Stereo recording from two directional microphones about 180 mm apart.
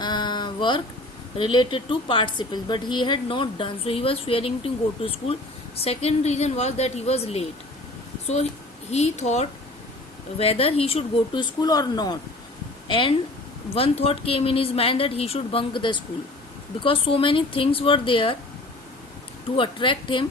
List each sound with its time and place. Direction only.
0.0 s a sound: 25° left (ahead or behind)
1.4 s a woman's voice: 30° left (ahead or behind)
8.9 s a woman's voice: 35° left (ahead or behind)
19.5 s a woman's voice: 25° left (ahead or behind)